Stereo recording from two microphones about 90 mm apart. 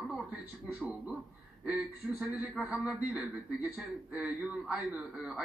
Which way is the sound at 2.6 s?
15° right (ahead or behind).